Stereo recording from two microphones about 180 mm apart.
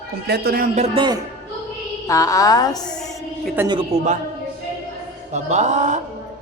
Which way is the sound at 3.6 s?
10° right (ahead or behind).